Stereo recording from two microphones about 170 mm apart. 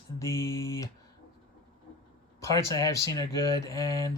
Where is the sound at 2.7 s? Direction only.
20° left (ahead or behind).